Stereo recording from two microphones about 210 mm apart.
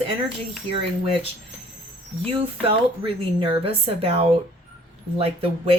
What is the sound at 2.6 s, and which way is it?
A woman's voice, 25° right (ahead or behind).